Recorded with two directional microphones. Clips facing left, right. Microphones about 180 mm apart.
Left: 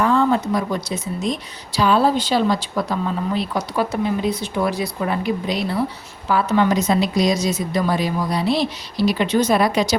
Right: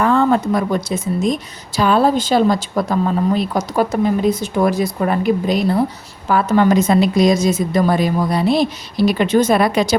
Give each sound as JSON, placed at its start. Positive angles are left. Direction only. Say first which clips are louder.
{"t": 0.0, "sound": "speech", "louder": "right 3 dB", "side_deg": -55}